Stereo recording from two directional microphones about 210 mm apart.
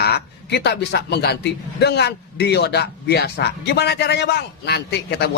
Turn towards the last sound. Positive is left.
turn(degrees=50)  # may be behind; listen again after turning